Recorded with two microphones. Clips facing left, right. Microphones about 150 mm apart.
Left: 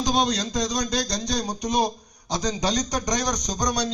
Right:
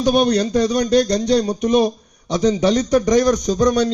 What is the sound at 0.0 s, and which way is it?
A man's voice, 60° right (ahead or behind).